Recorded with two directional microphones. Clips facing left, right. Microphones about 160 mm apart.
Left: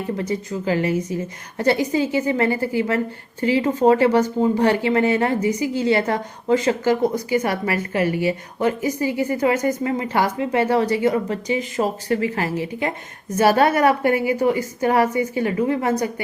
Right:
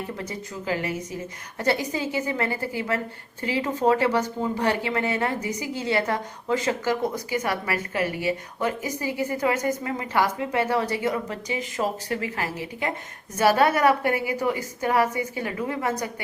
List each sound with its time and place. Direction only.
0.3 s speech: 30° left (ahead or behind)